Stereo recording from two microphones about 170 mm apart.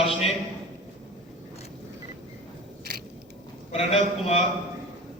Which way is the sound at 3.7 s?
35° left (ahead or behind).